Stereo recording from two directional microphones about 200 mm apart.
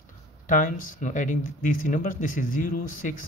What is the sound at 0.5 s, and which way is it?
Speech, 40° left (ahead or behind).